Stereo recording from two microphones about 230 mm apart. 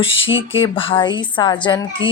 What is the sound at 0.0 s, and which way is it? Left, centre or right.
A woman's voice, left.